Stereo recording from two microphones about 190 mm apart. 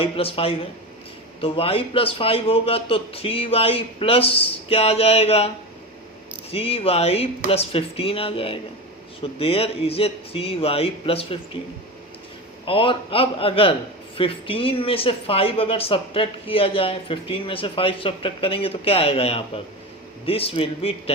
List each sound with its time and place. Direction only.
0.0 s a man's voice: 30° left (ahead or behind)
6.5 s a man's voice: 30° left (ahead or behind)
12.6 s a man's voice: 30° left (ahead or behind)